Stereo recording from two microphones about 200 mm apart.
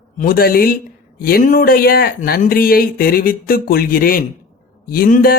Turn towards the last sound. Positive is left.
turn(degrees=45)  # may be behind; listen again after turning